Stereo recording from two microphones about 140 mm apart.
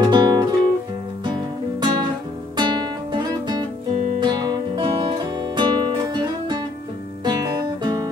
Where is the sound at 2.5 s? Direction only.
35° right (ahead or behind).